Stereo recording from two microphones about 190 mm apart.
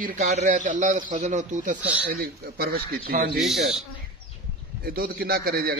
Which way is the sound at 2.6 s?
55° right (ahead or behind).